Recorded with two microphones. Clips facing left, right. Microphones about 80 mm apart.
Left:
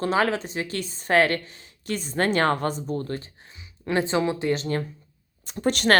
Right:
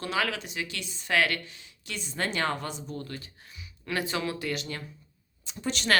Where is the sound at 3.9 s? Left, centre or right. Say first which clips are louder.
Left 7 dB; left.